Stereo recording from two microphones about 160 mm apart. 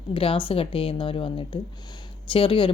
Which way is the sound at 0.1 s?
35° left (ahead or behind).